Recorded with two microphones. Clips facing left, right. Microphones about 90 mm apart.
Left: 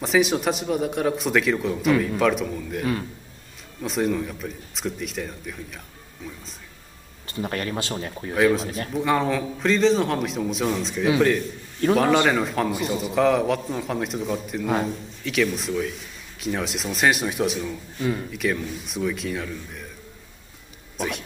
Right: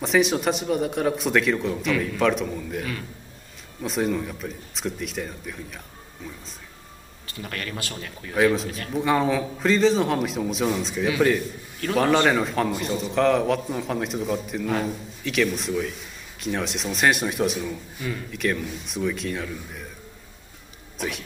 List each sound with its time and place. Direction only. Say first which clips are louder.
0.0 s speech: even; centre (ahead or behind)
2.8 s a man's voice: left 6 dB; 30° left (ahead or behind)
3.8 s speech: left 1 dB; centre (ahead or behind)
7.2 s speech: left 6 dB; 30° left (ahead or behind)
8.4 s speech: left 1 dB; centre (ahead or behind)
8.6 s a man's voice: left 3 dB; 30° left (ahead or behind)
8.9 s speech: right 1 dB; centre (ahead or behind)